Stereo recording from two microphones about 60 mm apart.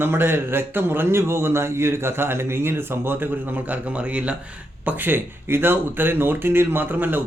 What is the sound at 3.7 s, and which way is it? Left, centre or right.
Speech, right.